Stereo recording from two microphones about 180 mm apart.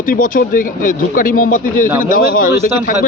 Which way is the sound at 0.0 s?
50° left (ahead or behind).